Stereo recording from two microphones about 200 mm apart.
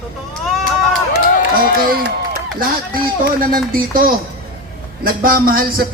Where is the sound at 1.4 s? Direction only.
50° right (ahead or behind).